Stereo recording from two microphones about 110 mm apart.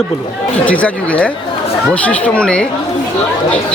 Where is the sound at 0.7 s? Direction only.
10° left (ahead or behind).